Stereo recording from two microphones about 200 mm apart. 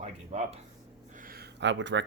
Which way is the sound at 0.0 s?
30° right (ahead or behind).